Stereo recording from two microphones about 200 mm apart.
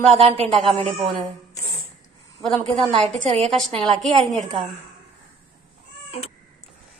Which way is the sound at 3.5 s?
Centre (ahead or behind).